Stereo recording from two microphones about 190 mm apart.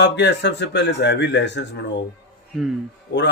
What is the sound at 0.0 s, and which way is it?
A man's voice, 65° left (ahead or behind).